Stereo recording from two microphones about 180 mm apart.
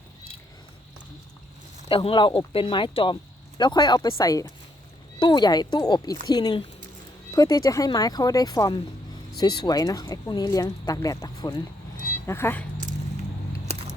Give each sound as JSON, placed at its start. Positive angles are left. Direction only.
{"t": 1.9, "sound": "speech", "side_deg": 30}